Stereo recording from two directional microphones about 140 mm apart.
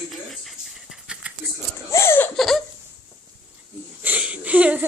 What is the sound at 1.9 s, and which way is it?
Laughter, 20° left (ahead or behind).